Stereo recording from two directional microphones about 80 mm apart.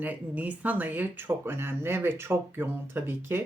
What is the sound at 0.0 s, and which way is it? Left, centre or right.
Speech, right.